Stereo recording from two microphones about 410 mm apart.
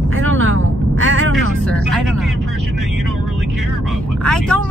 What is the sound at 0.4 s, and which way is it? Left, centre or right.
Vehicle, right.